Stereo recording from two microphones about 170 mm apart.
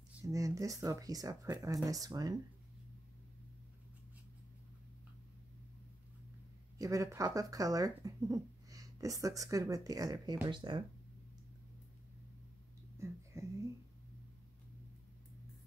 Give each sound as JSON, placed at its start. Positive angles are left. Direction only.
{"t": 0.3, "sound": "speech", "side_deg": -20}
{"t": 6.8, "sound": "speech", "side_deg": -20}
{"t": 13.0, "sound": "a sound", "side_deg": -15}